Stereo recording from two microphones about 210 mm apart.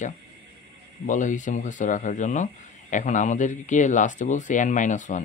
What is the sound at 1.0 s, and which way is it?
Speech, 35° left (ahead or behind).